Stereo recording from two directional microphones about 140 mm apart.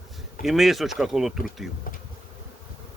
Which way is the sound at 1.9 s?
80° left.